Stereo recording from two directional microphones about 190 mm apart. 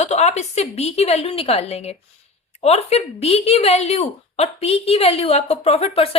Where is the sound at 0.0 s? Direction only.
35° left (ahead or behind).